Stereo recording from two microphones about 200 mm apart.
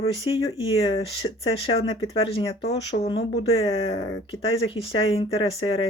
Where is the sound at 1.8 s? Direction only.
30° left (ahead or behind).